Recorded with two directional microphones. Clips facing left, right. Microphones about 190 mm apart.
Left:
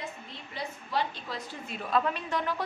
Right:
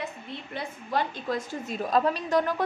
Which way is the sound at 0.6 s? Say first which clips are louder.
Right 3 dB; 50° right (ahead or behind).